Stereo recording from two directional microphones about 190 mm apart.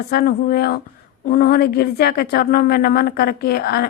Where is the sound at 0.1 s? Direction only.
50° left (ahead or behind).